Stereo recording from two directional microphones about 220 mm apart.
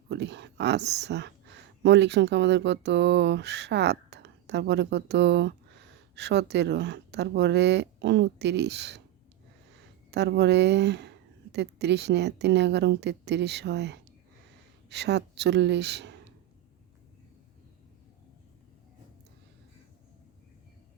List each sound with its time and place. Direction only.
0.1 s speech: 50° right (ahead or behind)
10.1 s a woman's voice: 50° right (ahead or behind)